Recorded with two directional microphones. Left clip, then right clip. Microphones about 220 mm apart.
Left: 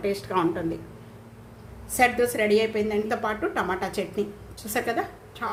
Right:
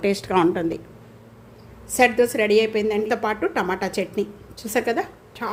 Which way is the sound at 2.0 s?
30° right (ahead or behind).